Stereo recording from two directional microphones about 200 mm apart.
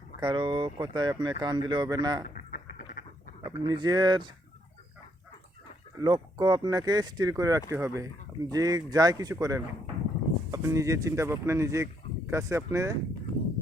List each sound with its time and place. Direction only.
0.2 s speech: 25° right (ahead or behind)
2.3 s a sound: 40° left (ahead or behind)
3.4 s speech: 20° right (ahead or behind)
6.0 s speech: 20° right (ahead or behind)